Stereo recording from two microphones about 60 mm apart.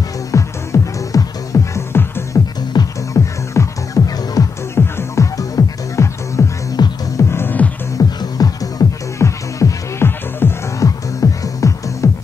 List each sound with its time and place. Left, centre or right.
0.3 s music: left
1.1 s music: left
1.5 s music: left
1.9 s music: left
2.3 s music: left
4.7 s music: left
7.2 s music: left
8.0 s music: left
9.2 s music: left
10.8 s music: left